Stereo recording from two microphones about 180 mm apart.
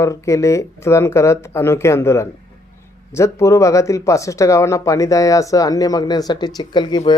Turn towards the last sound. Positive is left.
turn(degrees=25)  # may be behind; listen again after turning